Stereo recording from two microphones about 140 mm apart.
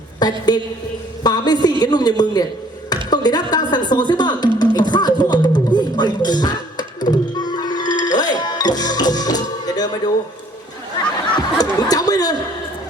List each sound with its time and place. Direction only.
0.2 s a woman's voice: 30° left (ahead or behind)
2.9 s music: 30° left (ahead or behind)
11.3 s snicker: 30° left (ahead or behind)